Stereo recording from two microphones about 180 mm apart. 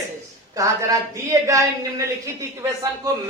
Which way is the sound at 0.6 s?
20° right (ahead or behind).